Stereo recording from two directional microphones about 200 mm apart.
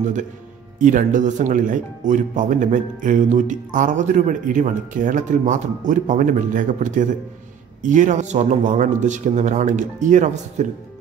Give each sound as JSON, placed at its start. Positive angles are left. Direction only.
{"t": 0.0, "sound": "speech", "side_deg": -40}